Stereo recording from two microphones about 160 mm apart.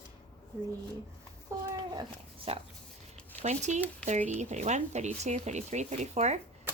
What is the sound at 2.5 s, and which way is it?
Speech, 40° right (ahead or behind).